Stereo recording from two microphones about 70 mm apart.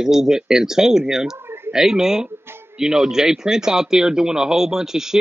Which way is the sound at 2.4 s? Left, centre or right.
Right.